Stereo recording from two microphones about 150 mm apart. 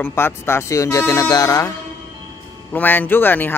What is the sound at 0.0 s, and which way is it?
Speech, 15° left (ahead or behind).